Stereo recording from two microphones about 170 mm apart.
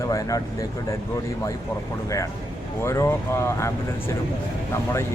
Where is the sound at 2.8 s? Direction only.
15° left (ahead or behind).